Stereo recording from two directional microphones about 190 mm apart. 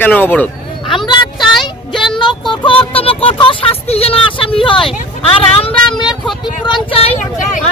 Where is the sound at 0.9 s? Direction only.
25° left (ahead or behind).